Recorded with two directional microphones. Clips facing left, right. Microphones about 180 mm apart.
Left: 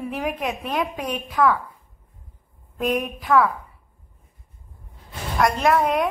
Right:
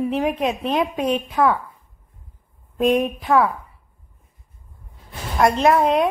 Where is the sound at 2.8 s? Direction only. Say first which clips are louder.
Right 6 dB; 25° right (ahead or behind).